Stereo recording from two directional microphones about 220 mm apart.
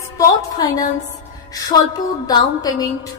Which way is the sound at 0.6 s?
15° left (ahead or behind).